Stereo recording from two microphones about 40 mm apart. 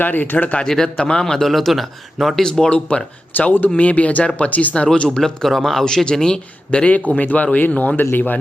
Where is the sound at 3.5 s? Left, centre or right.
Left.